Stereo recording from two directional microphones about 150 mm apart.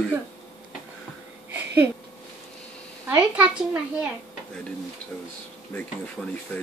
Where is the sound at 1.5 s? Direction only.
15° right (ahead or behind).